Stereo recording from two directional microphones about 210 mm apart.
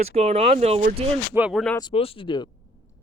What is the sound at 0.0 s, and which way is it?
Speech, 30° right (ahead or behind).